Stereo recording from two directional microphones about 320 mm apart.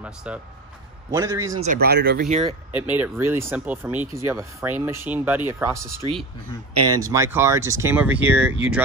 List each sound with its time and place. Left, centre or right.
0.0 s speech: centre
1.6 s speech: right
2.7 s speech: centre